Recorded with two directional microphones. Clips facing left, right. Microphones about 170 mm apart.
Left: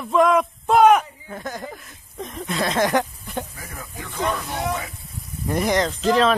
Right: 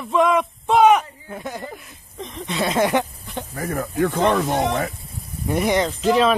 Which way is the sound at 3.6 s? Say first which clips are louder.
Right 15 dB; 60° right (ahead or behind).